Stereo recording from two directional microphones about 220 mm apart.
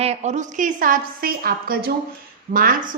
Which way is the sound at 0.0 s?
30° right (ahead or behind).